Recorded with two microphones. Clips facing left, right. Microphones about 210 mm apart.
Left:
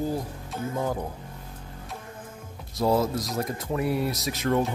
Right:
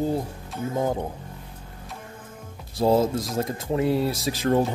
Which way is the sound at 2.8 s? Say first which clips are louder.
Right 3 dB; 25° right (ahead or behind).